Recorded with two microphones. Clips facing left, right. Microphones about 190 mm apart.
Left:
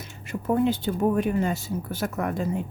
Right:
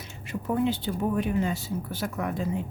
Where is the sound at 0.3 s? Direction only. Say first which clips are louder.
Left 3 dB; 45° left (ahead or behind).